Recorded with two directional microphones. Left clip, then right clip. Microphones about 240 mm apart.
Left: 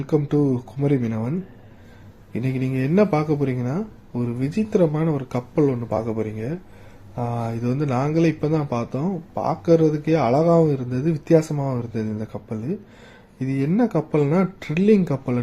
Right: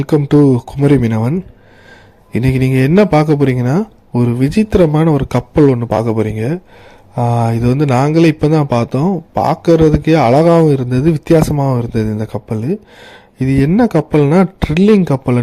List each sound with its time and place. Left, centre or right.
0.0 s speech: right